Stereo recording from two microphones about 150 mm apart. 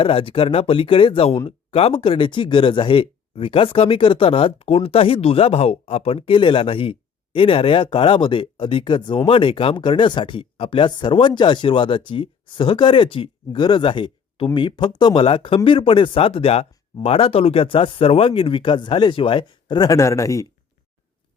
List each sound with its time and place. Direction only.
0.0 s speech: 35° left (ahead or behind); by 20.5 s 20° left (ahead or behind)